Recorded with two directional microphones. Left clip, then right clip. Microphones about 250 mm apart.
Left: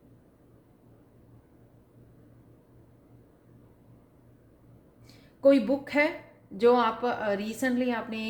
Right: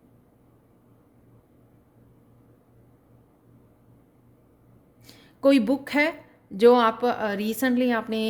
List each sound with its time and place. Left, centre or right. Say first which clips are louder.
5.0 s a woman's voice: right 1 dB; right